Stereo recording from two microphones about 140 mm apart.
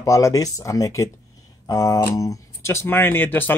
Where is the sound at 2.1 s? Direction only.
25° left (ahead or behind).